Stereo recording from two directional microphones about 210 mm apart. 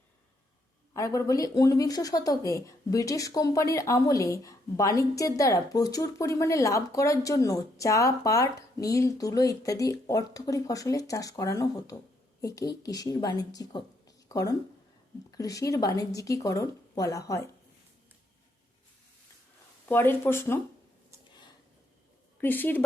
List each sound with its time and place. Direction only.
0.9 s speech: 15° left (ahead or behind)
19.9 s speech: 10° left (ahead or behind)
22.4 s speech: 10° left (ahead or behind)